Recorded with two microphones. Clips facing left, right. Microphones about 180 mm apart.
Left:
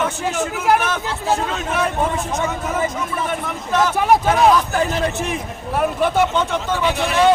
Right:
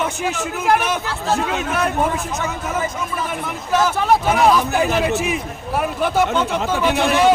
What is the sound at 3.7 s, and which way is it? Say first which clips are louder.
Speech: right 1 dB; 5° right (ahead or behind).